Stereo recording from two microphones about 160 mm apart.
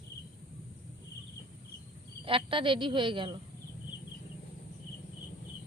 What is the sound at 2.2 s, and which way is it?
Speech, 35° right (ahead or behind).